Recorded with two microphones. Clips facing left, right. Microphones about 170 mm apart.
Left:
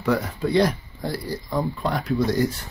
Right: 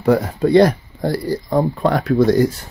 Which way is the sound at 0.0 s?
45° right (ahead or behind).